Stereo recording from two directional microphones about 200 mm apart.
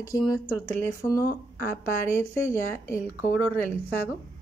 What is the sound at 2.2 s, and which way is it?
Speech, 10° left (ahead or behind).